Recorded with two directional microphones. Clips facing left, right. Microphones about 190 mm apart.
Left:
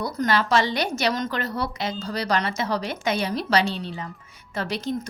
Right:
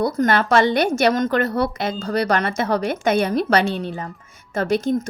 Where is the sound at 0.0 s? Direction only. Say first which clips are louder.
Right 5 dB; 50° right (ahead or behind).